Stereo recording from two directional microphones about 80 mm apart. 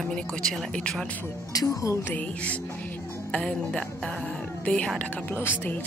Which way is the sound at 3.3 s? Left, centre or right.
Centre.